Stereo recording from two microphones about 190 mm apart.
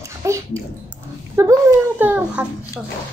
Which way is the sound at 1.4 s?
15° right (ahead or behind).